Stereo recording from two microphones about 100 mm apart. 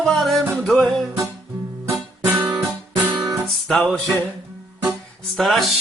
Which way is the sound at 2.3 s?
25° right (ahead or behind).